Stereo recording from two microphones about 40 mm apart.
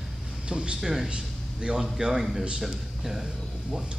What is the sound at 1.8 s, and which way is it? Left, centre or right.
Speech, centre.